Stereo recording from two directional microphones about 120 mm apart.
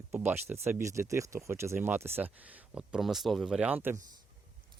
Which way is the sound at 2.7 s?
5° right (ahead or behind).